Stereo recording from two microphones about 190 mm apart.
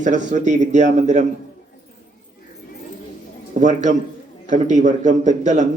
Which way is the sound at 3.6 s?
40° right (ahead or behind).